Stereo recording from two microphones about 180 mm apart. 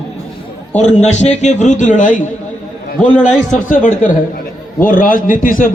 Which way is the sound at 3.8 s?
45° left (ahead or behind).